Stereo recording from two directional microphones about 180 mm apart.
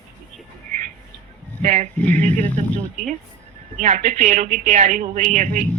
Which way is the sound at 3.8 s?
40° right (ahead or behind).